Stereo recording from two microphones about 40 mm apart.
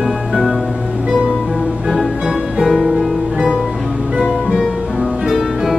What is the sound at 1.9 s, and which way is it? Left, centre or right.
Music, centre.